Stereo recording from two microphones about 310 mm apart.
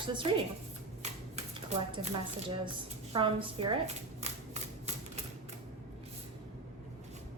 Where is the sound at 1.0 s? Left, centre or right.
Right.